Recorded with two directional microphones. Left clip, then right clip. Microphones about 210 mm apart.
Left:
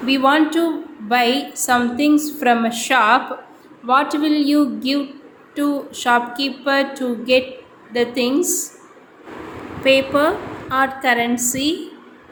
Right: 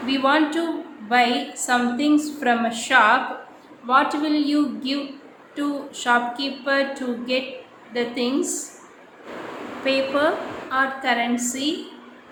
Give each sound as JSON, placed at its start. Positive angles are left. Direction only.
{"t": 0.0, "sound": "a woman's voice", "side_deg": 25}
{"t": 9.8, "sound": "a woman's voice", "side_deg": 25}